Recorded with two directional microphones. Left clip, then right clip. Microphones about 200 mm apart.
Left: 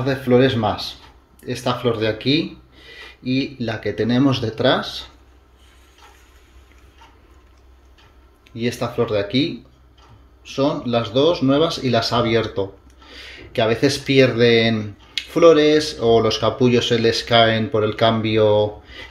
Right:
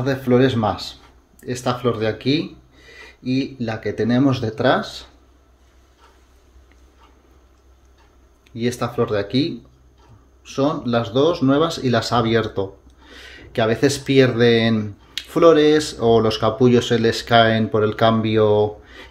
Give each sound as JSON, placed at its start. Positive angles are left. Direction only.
{"t": 0.0, "sound": "speech", "side_deg": -5}
{"t": 8.5, "sound": "speech", "side_deg": -10}